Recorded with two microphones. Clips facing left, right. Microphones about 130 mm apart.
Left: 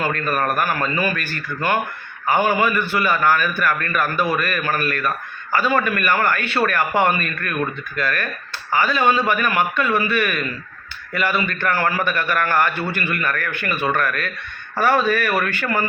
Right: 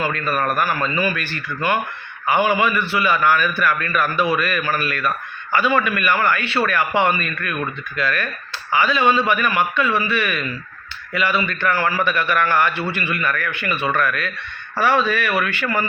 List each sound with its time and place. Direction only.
0.4 s a man's voice: 50° left (ahead or behind)